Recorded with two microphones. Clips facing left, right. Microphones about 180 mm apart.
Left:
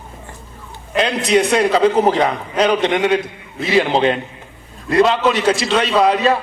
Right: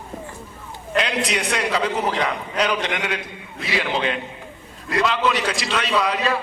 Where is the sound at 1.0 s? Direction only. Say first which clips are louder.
Left 8 dB; 30° left (ahead or behind).